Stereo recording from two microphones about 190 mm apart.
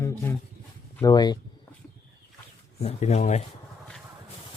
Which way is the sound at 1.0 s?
20° left (ahead or behind).